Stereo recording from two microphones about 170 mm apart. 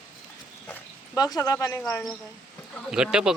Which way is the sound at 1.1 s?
20° left (ahead or behind).